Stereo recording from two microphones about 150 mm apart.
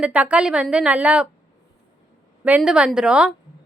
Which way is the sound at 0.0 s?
10° right (ahead or behind).